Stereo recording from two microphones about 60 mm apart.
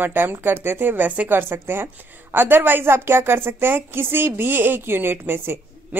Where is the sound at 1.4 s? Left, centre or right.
Right.